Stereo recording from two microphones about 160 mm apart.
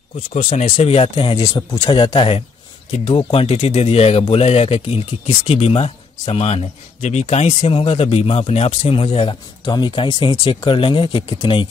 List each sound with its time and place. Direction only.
0.5 s speech: 35° left (ahead or behind)